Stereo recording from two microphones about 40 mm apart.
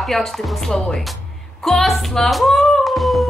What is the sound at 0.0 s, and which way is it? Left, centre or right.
Speech, centre.